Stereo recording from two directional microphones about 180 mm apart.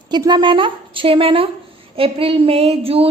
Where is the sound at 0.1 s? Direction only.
25° right (ahead or behind).